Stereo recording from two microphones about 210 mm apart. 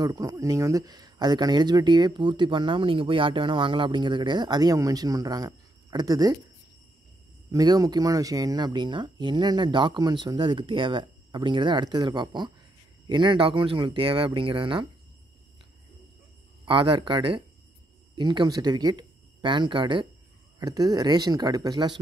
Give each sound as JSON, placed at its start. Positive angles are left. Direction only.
{"t": 0.0, "sound": "speech", "side_deg": -15}
{"t": 7.5, "sound": "speech", "side_deg": -15}
{"t": 16.6, "sound": "speech", "side_deg": -25}